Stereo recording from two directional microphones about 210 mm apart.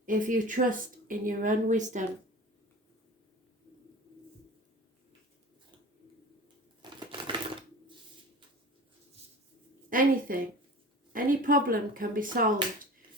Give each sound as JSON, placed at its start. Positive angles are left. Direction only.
{"t": 0.0, "sound": "a woman's voice", "side_deg": -40}
{"t": 6.8, "sound": "a sound", "side_deg": -20}
{"t": 9.9, "sound": "a woman's voice", "side_deg": -40}